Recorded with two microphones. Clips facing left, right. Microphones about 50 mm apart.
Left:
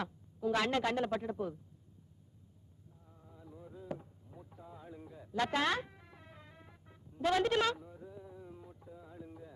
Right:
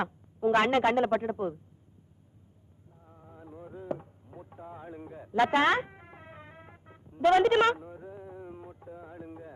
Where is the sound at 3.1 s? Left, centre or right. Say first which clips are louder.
Right 7 dB; right.